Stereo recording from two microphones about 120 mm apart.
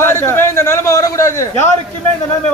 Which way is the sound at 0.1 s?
20° left (ahead or behind).